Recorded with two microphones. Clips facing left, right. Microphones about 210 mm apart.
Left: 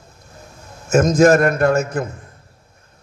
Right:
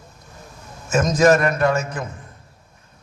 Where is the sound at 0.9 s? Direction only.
50° left (ahead or behind).